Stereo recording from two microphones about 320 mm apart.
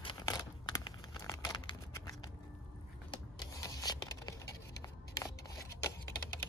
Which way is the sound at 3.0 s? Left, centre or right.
Centre.